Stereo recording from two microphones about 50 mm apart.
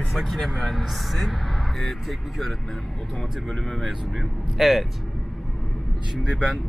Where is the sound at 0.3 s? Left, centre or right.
Centre.